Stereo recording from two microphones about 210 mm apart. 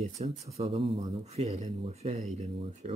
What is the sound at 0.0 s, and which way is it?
Speech, 30° right (ahead or behind).